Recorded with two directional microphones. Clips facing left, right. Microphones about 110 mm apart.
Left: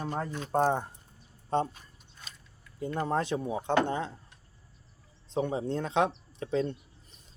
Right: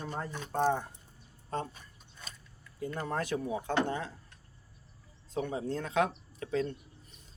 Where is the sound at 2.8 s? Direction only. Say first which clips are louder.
Left 5 dB; 25° left (ahead or behind).